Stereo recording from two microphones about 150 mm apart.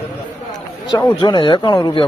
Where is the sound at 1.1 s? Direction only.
30° left (ahead or behind).